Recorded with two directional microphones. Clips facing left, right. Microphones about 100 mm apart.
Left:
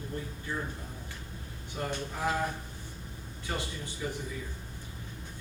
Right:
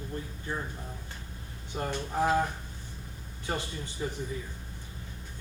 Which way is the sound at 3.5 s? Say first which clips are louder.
Right 2 dB; 35° right (ahead or behind).